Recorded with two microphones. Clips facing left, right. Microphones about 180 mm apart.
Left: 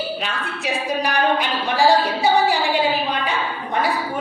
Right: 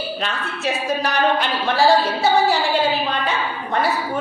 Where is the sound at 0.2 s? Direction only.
10° left (ahead or behind).